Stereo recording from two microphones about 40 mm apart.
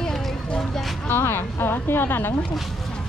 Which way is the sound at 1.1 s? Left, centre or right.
Left.